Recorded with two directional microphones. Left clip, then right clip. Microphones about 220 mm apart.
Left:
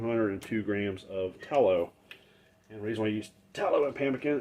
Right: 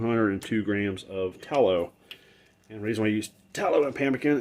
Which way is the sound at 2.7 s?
45° right (ahead or behind).